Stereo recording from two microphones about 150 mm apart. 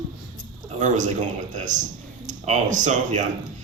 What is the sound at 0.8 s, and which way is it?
Speech, 55° right (ahead or behind).